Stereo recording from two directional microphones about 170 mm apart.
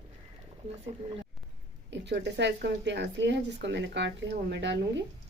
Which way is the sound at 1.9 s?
85° right.